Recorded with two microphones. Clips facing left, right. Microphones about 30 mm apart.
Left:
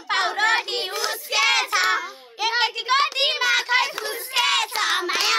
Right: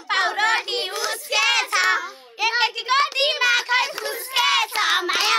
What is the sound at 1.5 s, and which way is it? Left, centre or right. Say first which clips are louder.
Child singing: right 1 dB; centre.